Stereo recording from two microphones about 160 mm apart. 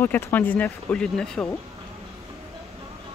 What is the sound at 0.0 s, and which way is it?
Speech, 10° left (ahead or behind).